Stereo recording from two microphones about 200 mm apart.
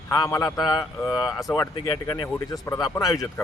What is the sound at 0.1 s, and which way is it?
Speech, 15° left (ahead or behind).